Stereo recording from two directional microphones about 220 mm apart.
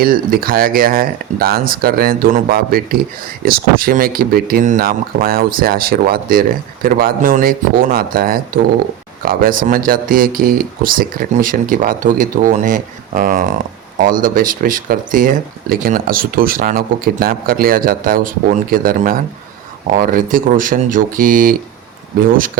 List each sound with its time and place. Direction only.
0.0 s speech: 40° right (ahead or behind)